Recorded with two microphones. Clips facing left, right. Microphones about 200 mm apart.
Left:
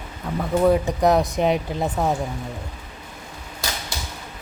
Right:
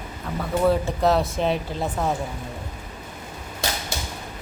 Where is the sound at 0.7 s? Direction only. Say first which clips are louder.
Left 2 dB; 15° left (ahead or behind).